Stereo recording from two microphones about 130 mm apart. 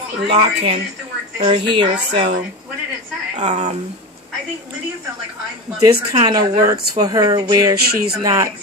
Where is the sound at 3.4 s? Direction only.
65° right (ahead or behind).